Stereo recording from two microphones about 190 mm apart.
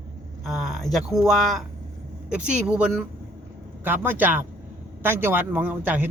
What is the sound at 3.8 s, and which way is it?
A man's voice, 10° right (ahead or behind).